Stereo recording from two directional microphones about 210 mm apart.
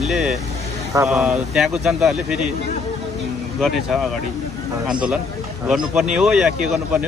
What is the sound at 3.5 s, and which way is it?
Speech, centre (ahead or behind).